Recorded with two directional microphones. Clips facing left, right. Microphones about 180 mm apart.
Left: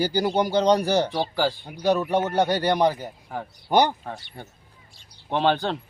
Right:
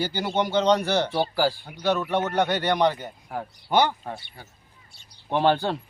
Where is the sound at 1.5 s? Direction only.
20° left (ahead or behind).